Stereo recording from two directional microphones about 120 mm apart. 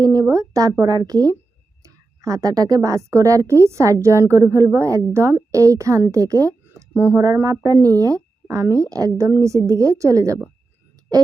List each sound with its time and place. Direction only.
0.0 s a woman's voice: 30° right (ahead or behind)
6.9 s speech: 15° right (ahead or behind)
7.2 s a woman's voice: 25° right (ahead or behind)